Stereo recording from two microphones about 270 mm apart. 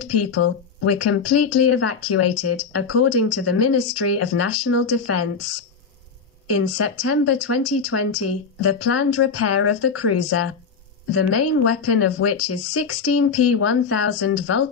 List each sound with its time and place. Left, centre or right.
0.2 s speech: left